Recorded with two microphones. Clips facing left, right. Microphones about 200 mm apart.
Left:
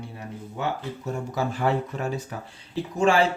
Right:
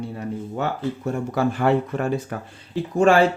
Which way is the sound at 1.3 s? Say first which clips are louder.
Right 5 dB; 60° right (ahead or behind).